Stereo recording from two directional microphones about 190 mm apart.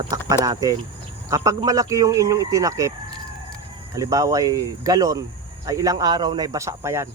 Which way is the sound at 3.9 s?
20° right (ahead or behind).